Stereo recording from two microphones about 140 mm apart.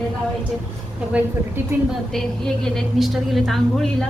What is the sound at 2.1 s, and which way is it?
A woman's voice, 5° left (ahead or behind).